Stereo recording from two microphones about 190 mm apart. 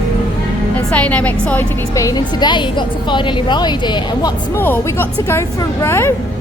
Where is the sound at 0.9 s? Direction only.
5° left (ahead or behind); by 4.3 s 25° left (ahead or behind).